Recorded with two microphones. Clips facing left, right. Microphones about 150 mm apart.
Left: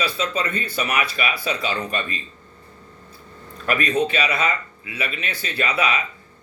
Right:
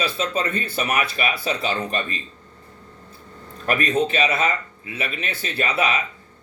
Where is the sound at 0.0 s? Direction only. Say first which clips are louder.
Right 1 dB; 50° right (ahead or behind).